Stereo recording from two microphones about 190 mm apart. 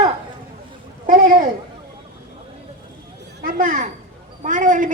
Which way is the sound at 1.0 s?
45° right (ahead or behind).